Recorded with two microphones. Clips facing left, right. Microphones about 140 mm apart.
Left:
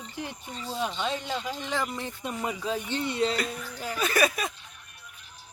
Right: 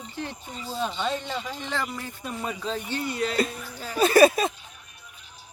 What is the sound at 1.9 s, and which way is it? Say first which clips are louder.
Speech: left 1 dB; 20° left (ahead or behind).